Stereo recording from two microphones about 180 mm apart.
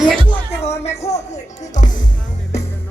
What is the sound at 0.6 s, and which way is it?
Speech, 35° left (ahead or behind).